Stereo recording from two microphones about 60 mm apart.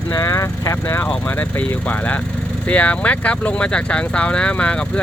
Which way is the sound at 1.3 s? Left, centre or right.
Left.